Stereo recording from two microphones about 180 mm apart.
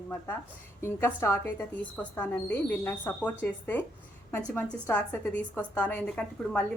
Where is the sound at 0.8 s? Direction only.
15° left (ahead or behind).